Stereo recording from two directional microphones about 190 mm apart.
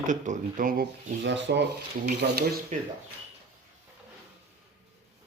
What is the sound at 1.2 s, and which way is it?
Rub, 65° right (ahead or behind).